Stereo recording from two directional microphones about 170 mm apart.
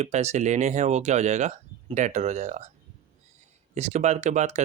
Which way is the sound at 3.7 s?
40° right (ahead or behind).